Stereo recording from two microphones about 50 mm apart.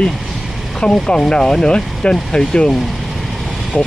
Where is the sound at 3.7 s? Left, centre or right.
Left.